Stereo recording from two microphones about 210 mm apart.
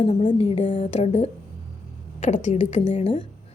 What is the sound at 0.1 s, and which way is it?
A woman's voice, 35° left (ahead or behind).